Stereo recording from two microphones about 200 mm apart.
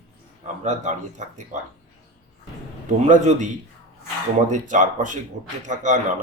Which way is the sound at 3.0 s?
35° right (ahead or behind).